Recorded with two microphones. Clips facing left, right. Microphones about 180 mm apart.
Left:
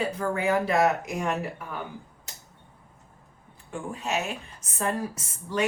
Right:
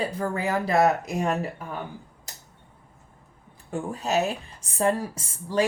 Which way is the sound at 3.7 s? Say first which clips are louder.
Right 4 dB; 40° right (ahead or behind).